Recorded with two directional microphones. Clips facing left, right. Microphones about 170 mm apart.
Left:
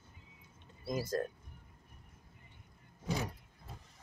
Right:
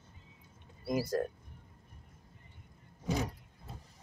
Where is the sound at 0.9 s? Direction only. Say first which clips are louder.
Right 3 dB; 10° right (ahead or behind).